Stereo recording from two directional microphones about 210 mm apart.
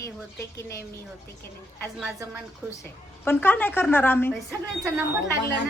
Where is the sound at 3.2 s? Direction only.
10° left (ahead or behind).